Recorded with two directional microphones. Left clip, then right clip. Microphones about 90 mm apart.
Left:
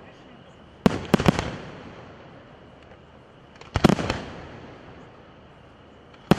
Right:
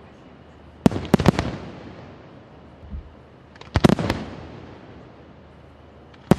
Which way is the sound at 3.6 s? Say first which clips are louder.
Right 2 dB; 20° left (ahead or behind).